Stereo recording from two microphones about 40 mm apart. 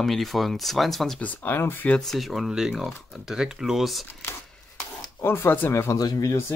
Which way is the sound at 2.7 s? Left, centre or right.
Centre.